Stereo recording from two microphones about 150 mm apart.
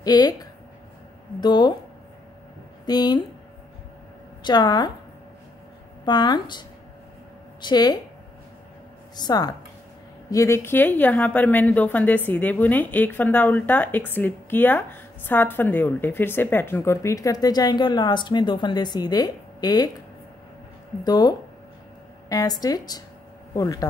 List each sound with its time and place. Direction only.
0.0 s a woman's voice: 25° left (ahead or behind)
2.9 s a woman's voice: 25° left (ahead or behind)
4.4 s a woman's voice: 30° left (ahead or behind)
6.0 s a woman's voice: 30° left (ahead or behind)
7.6 s a woman's voice: 25° left (ahead or behind)
9.1 s a woman's voice: 30° left (ahead or behind)
21.0 s a woman's voice: 25° left (ahead or behind)